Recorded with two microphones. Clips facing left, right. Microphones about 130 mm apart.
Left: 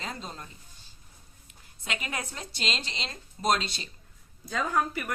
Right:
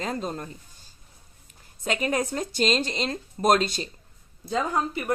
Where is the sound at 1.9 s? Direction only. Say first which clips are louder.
Right 10 dB; 40° right (ahead or behind).